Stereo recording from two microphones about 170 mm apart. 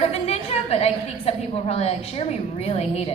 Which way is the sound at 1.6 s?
35° left (ahead or behind).